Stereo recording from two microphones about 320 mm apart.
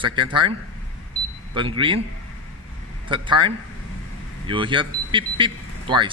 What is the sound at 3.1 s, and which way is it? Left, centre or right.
A man's voice, centre.